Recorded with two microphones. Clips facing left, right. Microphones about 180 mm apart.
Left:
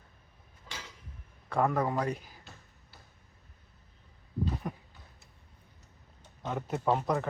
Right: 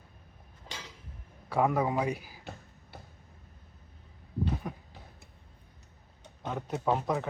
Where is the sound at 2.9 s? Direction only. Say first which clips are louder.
Right 10 dB; 60° right (ahead or behind).